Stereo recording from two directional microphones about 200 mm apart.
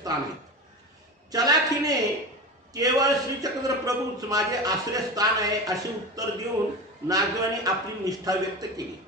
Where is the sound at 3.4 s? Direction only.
20° right (ahead or behind).